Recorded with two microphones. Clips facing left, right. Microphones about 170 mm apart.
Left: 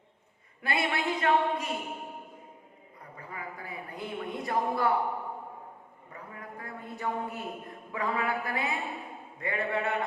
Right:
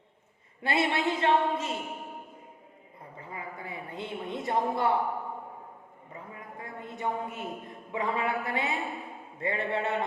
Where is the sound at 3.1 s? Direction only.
25° right (ahead or behind).